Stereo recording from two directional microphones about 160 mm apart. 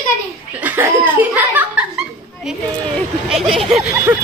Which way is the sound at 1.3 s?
10° right (ahead or behind).